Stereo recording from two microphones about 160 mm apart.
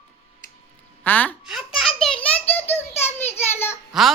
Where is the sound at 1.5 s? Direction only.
Centre (ahead or behind); by 3.8 s 15° left (ahead or behind).